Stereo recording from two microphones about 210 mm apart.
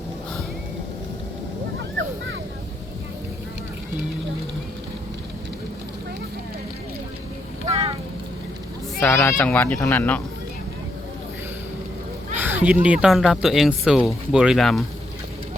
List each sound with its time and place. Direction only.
7.7 s vehicle: 30° right (ahead or behind)
9.0 s speech: 10° left (ahead or behind)
12.4 s speech: 10° right (ahead or behind)